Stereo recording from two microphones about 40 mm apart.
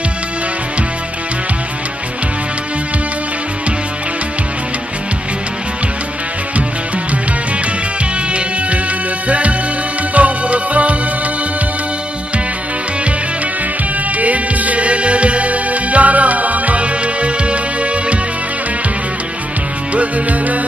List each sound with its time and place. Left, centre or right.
10.1 s music: right
14.1 s music: right
19.9 s music: right